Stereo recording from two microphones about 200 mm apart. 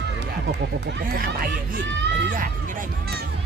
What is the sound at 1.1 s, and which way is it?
Speech, 45° right (ahead or behind).